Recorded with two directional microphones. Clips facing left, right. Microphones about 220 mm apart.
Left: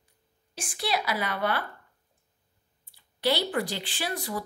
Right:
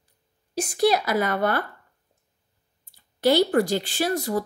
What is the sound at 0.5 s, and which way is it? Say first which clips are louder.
A woman's voice: right 10 dB; 40° right (ahead or behind).